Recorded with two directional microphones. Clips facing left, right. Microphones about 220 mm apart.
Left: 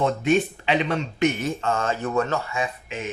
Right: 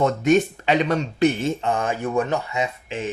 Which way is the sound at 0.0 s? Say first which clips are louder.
Right 3 dB; 45° right (ahead or behind).